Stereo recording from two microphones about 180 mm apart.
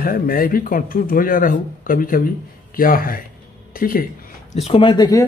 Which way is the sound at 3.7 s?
55° left (ahead or behind).